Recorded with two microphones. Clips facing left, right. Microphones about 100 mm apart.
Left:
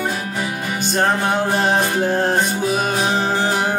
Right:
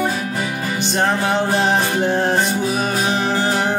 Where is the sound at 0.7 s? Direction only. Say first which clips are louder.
Left 1 dB; 45° left (ahead or behind).